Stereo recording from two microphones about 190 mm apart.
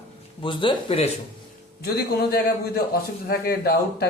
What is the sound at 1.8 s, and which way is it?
A man's voice, 55° left (ahead or behind).